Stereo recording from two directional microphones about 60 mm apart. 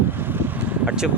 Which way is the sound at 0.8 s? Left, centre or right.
Centre.